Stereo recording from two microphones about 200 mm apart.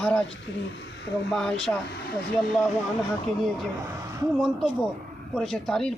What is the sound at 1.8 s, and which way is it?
Speech, 55° left (ahead or behind).